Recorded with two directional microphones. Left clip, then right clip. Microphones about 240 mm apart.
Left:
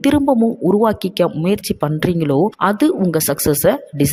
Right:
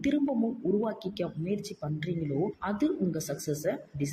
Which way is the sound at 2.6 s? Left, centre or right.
Left.